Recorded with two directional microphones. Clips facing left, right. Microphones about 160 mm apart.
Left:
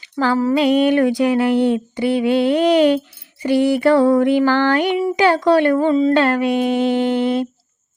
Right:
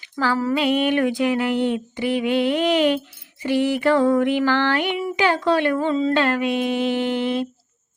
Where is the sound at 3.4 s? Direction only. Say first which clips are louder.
Left 5 dB; 35° left (ahead or behind).